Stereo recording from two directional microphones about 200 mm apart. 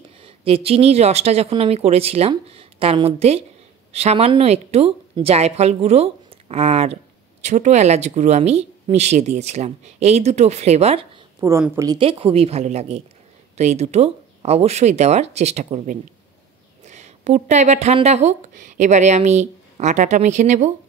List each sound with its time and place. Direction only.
0.2 s speech: 30° right (ahead or behind)
11.4 s a woman's voice: 15° right (ahead or behind)
12.0 s a woman's voice: 30° right (ahead or behind)